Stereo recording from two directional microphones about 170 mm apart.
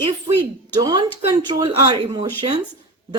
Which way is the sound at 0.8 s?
20° right (ahead or behind).